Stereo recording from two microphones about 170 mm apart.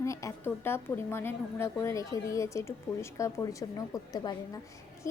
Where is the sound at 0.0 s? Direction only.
20° left (ahead or behind).